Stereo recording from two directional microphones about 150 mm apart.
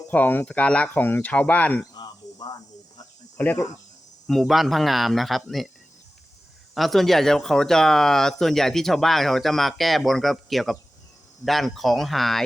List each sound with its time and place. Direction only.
0.1 s speech: 10° left (ahead or behind)
2.0 s cricket: 25° left (ahead or behind)
3.3 s speech: 10° left (ahead or behind)
6.7 s speech: centre (ahead or behind)